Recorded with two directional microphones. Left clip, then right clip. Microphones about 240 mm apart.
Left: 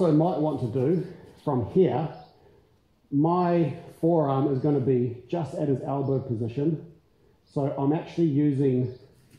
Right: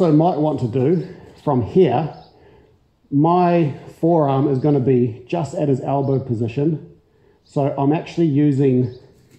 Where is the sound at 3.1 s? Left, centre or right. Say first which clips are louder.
Right 8 dB; right.